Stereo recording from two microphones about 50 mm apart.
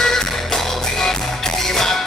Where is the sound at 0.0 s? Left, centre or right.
Centre.